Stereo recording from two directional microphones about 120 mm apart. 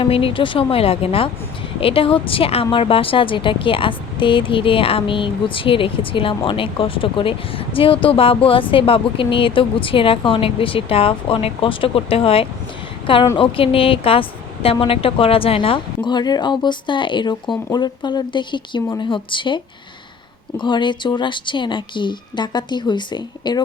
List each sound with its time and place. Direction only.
0.0 s a woman's voice: 50° left (ahead or behind)